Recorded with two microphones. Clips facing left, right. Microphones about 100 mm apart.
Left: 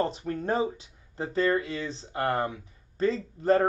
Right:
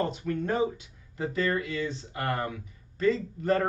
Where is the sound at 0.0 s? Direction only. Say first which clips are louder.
Left 1 dB; 30° left (ahead or behind).